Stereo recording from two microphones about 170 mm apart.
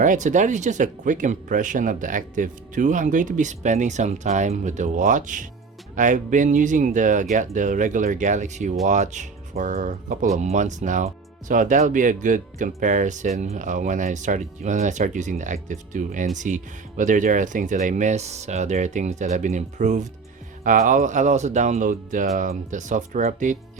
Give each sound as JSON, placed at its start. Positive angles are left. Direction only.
{"t": 0.0, "sound": "speech", "side_deg": -45}